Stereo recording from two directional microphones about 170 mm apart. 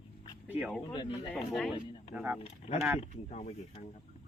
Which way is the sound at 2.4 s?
35° left (ahead or behind).